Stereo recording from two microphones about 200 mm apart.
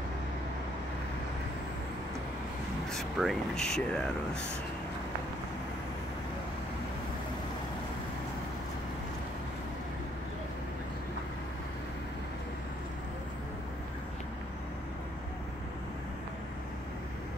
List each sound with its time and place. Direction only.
2.9 s speech: centre (ahead or behind)